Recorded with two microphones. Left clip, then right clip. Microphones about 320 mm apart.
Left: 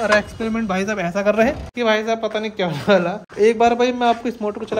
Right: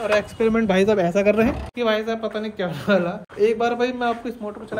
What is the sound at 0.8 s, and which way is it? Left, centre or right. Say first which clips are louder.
Speech: right 3 dB; left.